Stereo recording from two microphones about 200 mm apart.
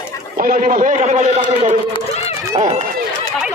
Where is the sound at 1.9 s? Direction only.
30° left (ahead or behind).